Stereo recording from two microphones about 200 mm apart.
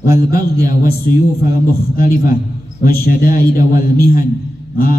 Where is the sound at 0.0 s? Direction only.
50° left (ahead or behind).